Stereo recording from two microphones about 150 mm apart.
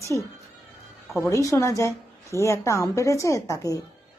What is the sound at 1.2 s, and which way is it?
A woman's voice, 20° left (ahead or behind).